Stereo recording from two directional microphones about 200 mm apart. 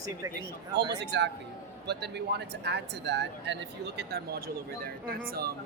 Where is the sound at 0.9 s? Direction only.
60° right (ahead or behind).